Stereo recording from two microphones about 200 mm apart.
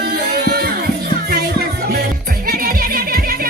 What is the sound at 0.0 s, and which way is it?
Music, 55° right (ahead or behind).